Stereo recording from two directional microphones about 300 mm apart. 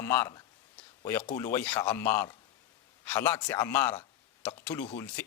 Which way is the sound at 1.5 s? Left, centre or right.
Centre.